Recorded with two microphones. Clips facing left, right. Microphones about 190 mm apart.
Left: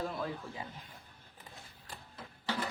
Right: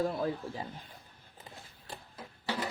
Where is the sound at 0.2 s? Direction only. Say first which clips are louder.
Right 5 dB; 35° right (ahead or behind).